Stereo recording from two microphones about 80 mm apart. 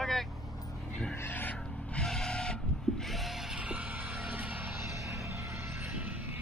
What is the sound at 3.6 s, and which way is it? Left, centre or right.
Music, centre.